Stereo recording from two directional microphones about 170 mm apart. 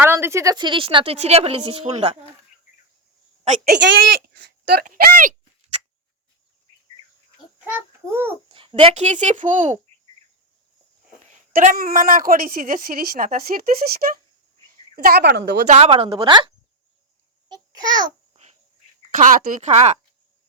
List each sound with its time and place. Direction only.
0.0 s a woman's voice: 15° right (ahead or behind); by 2.1 s 35° right (ahead or behind)
3.4 s a woman's voice: 45° right (ahead or behind)
3.7 s speech: 90° right
4.4 s speech: 65° right (ahead or behind)
7.6 s a child's voice: 10° right (ahead or behind)
8.4 s a child's voice: 30° right (ahead or behind)
11.2 s a woman's voice: 50° right (ahead or behind)
14.9 s speech: 65° right (ahead or behind)
15.6 s a woman's voice: 40° right (ahead or behind)
17.5 s a sound: 25° right (ahead or behind)
19.2 s speech: 45° right (ahead or behind)